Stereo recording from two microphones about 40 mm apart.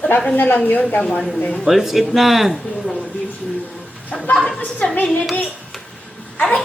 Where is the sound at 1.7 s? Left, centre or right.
Centre.